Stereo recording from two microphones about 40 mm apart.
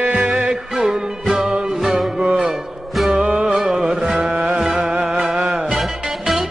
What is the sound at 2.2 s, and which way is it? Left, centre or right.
Music, right.